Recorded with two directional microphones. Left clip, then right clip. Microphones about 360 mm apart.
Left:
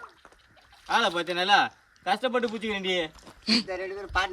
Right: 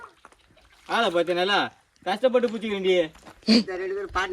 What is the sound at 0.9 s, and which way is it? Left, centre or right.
Speech, centre.